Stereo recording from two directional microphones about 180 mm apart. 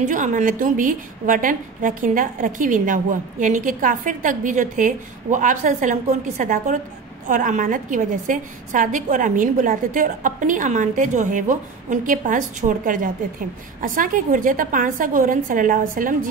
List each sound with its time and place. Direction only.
0.0 s a woman's voice: 45° right (ahead or behind)